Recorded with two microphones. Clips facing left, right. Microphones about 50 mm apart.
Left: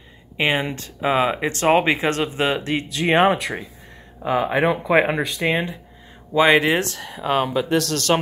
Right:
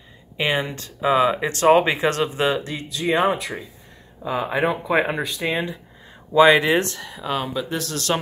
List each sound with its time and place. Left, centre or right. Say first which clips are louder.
0.4 s speech: left 2 dB; centre
2.0 s speech: even; left
2.6 s speech: left 4 dB; left
4.5 s speech: even; left
6.3 s speech: right 1 dB; centre
6.8 s speech: even; centre
7.7 s speech: left 7 dB; left